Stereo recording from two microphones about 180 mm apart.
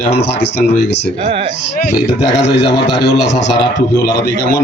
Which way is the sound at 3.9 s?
20° left (ahead or behind).